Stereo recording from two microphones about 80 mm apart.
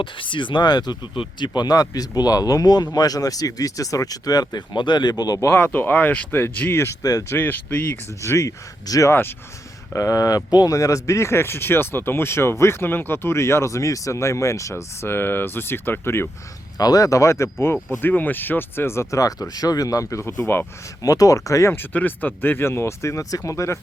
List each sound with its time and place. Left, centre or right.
0.0 s speech: left
4.7 s speech: left
5.5 s speech: left
7.0 s speech: left
7.3 s speech: left
8.2 s speech: left
16.7 s speech: left
18.0 s speech: left
21.8 s speech: left